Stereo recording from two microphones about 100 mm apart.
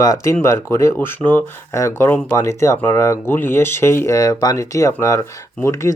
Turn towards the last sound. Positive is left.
turn(degrees=30)  # may be behind; listen again after turning